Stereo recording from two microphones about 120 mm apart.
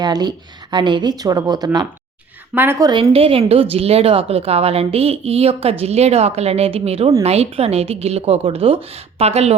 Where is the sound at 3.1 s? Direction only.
50° right (ahead or behind).